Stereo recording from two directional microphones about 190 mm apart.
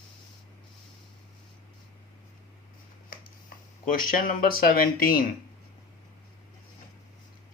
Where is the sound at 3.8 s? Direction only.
45° left (ahead or behind).